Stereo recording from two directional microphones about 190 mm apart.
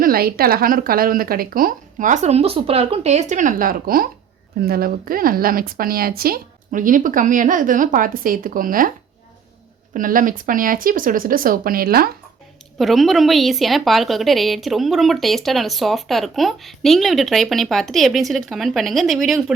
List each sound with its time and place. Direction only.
0.0 s speech: 50° right (ahead or behind)
9.9 s speech: 45° right (ahead or behind)
12.8 s a woman's voice: centre (ahead or behind)